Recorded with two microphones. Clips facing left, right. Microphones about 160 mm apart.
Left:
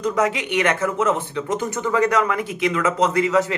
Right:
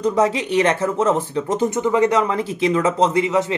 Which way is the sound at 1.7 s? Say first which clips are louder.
Right 1 dB; 20° right (ahead or behind).